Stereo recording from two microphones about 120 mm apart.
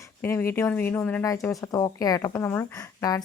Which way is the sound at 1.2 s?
25° left (ahead or behind).